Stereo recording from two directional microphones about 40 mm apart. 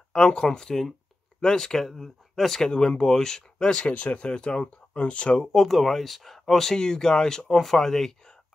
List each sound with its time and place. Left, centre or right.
0.1 s speech: left
1.9 s speech: centre
2.7 s speech: centre
5.5 s speech: centre
7.4 s speech: centre